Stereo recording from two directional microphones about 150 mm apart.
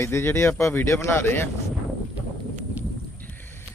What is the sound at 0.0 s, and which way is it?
Speech, 15° left (ahead or behind).